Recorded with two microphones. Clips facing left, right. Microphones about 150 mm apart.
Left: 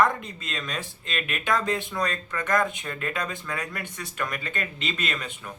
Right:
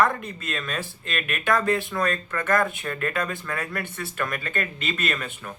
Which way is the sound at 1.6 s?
20° left (ahead or behind).